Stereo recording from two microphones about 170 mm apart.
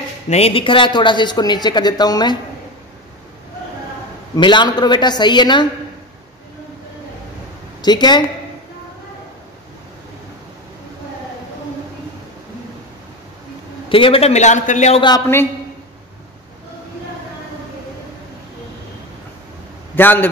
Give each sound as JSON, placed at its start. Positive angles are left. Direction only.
{"t": 0.3, "sound": "speech", "side_deg": 35}
{"t": 4.4, "sound": "speech", "side_deg": 25}
{"t": 7.8, "sound": "speech", "side_deg": 25}
{"t": 13.8, "sound": "a man's voice", "side_deg": 30}
{"t": 15.0, "sound": "speech", "side_deg": 25}
{"t": 20.0, "sound": "a man's voice", "side_deg": 10}